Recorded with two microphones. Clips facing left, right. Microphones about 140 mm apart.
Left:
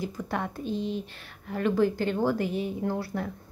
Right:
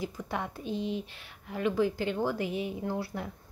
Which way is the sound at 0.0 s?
5° right (ahead or behind).